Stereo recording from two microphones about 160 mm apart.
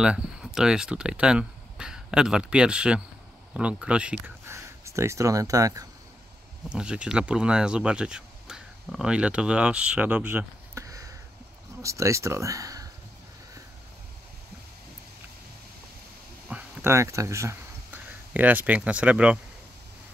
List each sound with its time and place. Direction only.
0.0 s speech: 5° right (ahead or behind)
4.6 s speech: 15° right (ahead or behind)
6.7 s speech: 5° right (ahead or behind); by 12.9 s 20° right (ahead or behind)
16.4 s speech: 10° right (ahead or behind)